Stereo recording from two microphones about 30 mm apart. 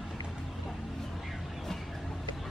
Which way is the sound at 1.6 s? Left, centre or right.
Centre.